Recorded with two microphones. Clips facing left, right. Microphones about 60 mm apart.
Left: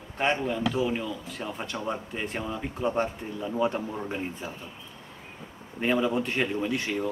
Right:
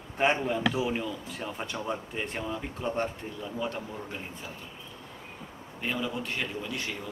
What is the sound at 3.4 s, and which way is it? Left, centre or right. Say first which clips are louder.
Speech: left 7 dB; left.